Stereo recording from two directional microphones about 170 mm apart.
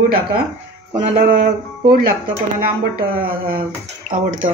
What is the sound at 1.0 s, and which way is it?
Speech, 50° right (ahead or behind).